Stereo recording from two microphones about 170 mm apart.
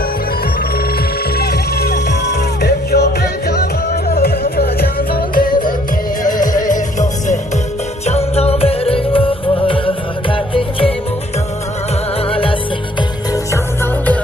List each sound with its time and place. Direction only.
1.4 s music: 65° left (ahead or behind); by 7.3 s 50° left (ahead or behind)
8.0 s music: 40° left (ahead or behind)
12.3 s music: 30° left (ahead or behind)